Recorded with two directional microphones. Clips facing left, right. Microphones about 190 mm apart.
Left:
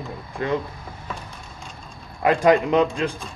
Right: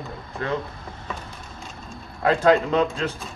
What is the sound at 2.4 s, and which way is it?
Speech, 15° left (ahead or behind).